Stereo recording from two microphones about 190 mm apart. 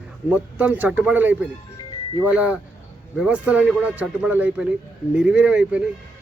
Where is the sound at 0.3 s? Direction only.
5° right (ahead or behind).